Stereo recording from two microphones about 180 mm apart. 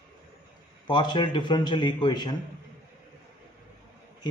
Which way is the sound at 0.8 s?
25° left (ahead or behind).